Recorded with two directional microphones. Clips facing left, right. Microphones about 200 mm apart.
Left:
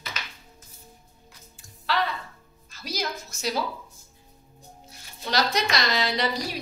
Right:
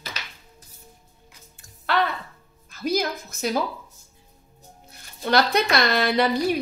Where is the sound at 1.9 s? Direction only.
55° right (ahead or behind).